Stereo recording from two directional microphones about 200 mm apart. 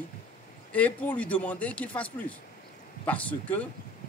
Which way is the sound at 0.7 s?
5° left (ahead or behind).